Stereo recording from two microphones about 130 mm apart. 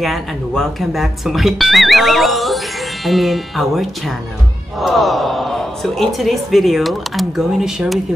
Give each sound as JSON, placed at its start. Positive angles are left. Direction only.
{"t": 0.0, "sound": "speech", "side_deg": 0}